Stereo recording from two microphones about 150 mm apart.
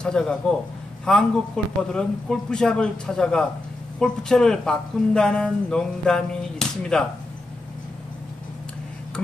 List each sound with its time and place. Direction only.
0.0 s speech: 5° left (ahead or behind)